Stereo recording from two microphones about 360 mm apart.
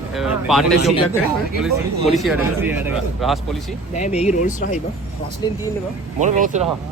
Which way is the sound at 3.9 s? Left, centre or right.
Centre.